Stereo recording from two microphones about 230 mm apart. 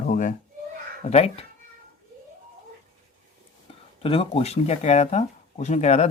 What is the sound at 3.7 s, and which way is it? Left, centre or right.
Speech, left.